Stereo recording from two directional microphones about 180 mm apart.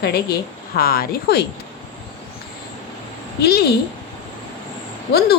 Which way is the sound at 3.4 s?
60° left (ahead or behind).